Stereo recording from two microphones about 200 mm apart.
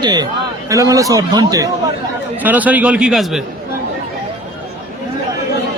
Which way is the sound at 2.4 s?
10° right (ahead or behind).